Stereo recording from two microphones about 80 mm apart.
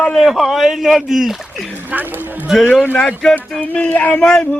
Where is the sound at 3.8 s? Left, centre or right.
Centre.